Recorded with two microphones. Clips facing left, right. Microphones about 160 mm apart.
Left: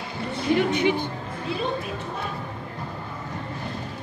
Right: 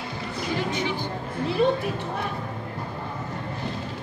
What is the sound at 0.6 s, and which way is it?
Speech, 60° left (ahead or behind).